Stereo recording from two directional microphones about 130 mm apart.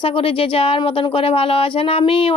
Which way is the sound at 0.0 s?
45° left (ahead or behind).